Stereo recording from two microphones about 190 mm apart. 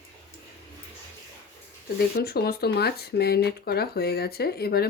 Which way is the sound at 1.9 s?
55° left (ahead or behind).